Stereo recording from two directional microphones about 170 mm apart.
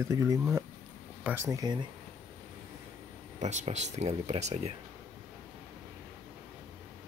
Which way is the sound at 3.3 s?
40° right (ahead or behind).